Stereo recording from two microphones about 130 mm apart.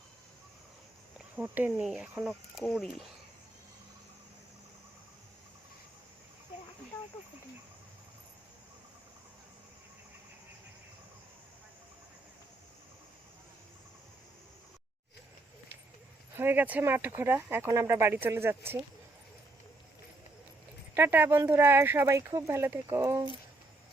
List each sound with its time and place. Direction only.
1.4 s speech: 15° right (ahead or behind)
16.4 s speech: 15° right (ahead or behind)
20.9 s speech: 15° right (ahead or behind)